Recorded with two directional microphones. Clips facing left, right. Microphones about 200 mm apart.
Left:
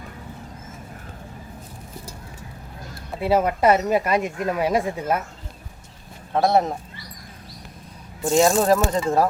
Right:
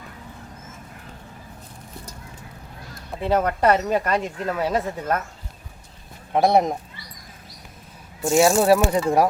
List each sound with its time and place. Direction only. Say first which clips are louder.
3.1 s speech: left 1 dB; 10° left (ahead or behind)
6.3 s speech: right 1 dB; 15° right (ahead or behind)
8.2 s speech: right 1 dB; 5° right (ahead or behind)